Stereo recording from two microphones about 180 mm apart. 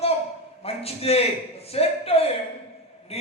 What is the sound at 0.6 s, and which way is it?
A man's voice, 35° left (ahead or behind).